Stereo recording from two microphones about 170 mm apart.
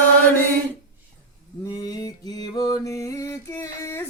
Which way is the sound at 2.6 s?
20° left (ahead or behind).